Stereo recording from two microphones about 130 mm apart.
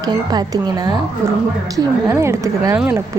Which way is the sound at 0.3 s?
30° right (ahead or behind).